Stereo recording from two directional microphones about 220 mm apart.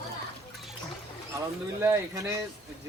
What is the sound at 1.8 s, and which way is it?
Speech, 15° right (ahead or behind).